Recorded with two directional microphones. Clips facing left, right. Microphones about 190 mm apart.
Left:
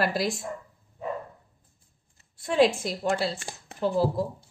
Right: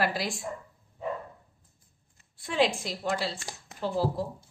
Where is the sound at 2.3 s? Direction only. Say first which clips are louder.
Left 5 dB; 45° left (ahead or behind).